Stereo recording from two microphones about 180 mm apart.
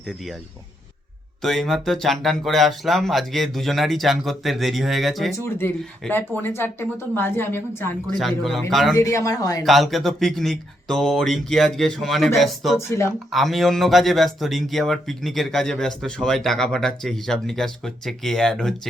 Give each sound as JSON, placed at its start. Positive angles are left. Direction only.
{"t": 1.4, "sound": "speech", "side_deg": 0}
{"t": 5.4, "sound": "a woman's voice", "side_deg": 15}
{"t": 8.0, "sound": "speech", "side_deg": 0}
{"t": 9.0, "sound": "speech", "side_deg": 15}
{"t": 9.6, "sound": "speech", "side_deg": 0}